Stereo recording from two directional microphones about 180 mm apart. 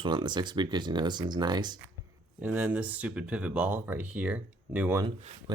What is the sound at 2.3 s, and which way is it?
Speech, 5° right (ahead or behind).